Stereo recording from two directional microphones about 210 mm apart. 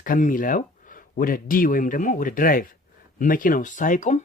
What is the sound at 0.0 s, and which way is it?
Speech, 40° left (ahead or behind).